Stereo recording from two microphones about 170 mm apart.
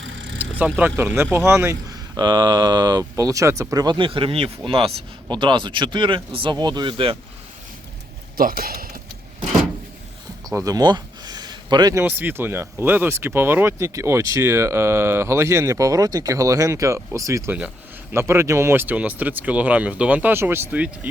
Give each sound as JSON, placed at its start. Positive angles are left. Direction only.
{"t": 0.0, "sound": "vehicle", "side_deg": -90}
{"t": 0.3, "sound": "speech", "side_deg": -10}
{"t": 8.4, "sound": "speech", "side_deg": -60}
{"t": 10.5, "sound": "speech", "side_deg": -20}